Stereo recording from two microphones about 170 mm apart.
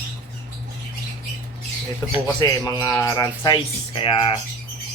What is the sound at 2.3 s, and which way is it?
Speech, 20° left (ahead or behind).